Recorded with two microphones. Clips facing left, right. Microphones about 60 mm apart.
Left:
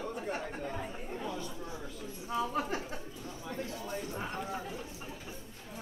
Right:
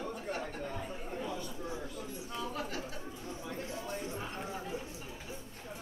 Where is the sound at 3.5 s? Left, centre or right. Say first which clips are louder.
Left 3 dB; right.